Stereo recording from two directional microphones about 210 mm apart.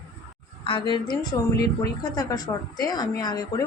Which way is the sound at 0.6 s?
25° left (ahead or behind).